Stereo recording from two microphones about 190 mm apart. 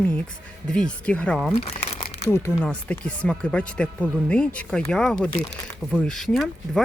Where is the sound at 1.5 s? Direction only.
35° left (ahead or behind).